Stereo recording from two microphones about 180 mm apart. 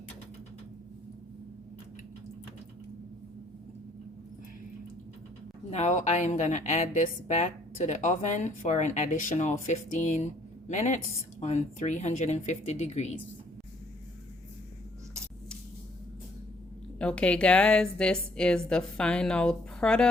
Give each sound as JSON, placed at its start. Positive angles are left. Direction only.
{"t": 5.7, "sound": "a woman's voice", "side_deg": 40}
{"t": 17.0, "sound": "a woman's voice", "side_deg": 5}